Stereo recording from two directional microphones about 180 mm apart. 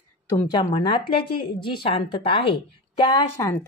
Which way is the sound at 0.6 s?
30° left (ahead or behind).